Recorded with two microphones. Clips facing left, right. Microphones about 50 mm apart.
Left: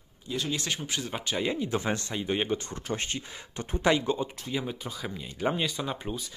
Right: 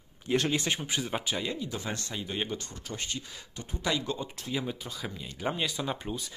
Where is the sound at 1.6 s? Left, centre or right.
Left.